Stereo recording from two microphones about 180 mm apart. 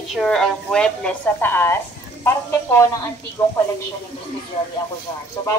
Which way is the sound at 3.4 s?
15° left (ahead or behind).